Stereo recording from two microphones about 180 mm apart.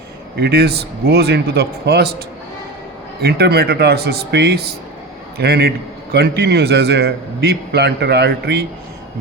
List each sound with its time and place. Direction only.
0.3 s a man's voice: 65° right (ahead or behind)